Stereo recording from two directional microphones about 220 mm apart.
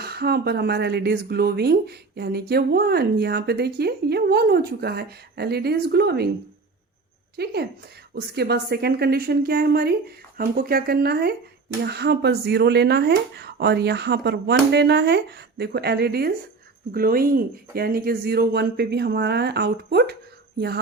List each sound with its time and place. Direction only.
0.0 s speech: 45° right (ahead or behind)
7.3 s speech: 45° right (ahead or behind)